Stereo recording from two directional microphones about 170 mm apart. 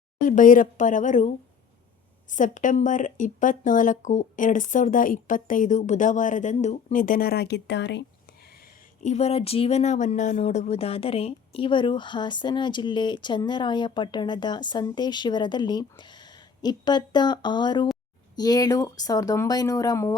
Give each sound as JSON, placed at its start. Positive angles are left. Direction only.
{"t": 0.2, "sound": "speech", "side_deg": 50}
{"t": 9.0, "sound": "speech", "side_deg": 40}